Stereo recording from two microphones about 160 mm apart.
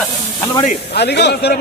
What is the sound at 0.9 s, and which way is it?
Speech, 90° left.